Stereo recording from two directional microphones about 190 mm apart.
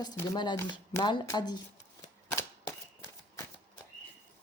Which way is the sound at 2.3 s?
15° left (ahead or behind).